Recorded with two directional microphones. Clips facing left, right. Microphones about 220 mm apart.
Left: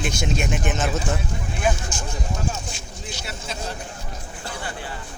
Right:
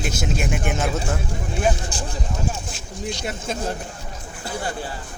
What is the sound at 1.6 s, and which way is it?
Speech, 35° right (ahead or behind).